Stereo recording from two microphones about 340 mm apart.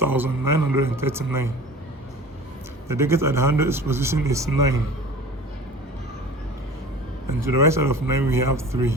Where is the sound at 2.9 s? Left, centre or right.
Centre.